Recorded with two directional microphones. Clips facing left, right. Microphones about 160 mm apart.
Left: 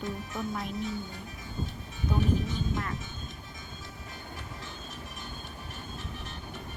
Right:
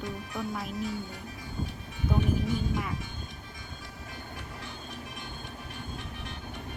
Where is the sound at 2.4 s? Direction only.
10° right (ahead or behind).